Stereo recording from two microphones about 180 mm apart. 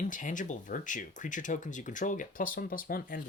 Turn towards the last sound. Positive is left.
turn(degrees=55)  # may be behind; listen again after turning